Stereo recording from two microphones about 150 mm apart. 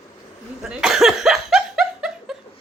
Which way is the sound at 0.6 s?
5° right (ahead or behind).